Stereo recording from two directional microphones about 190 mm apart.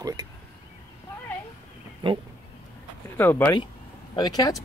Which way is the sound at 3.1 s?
10° left (ahead or behind).